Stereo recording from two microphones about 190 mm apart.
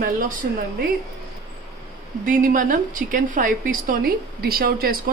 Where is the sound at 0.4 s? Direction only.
60° right (ahead or behind).